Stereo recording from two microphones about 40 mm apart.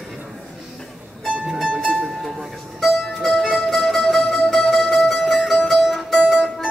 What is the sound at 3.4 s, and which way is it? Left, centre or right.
Music, centre.